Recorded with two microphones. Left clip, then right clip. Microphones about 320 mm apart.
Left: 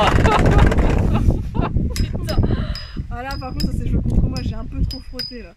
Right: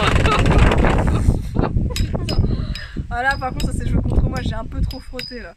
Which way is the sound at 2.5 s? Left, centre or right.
Left.